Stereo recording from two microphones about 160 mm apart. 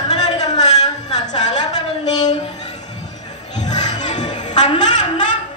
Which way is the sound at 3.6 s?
25° left (ahead or behind).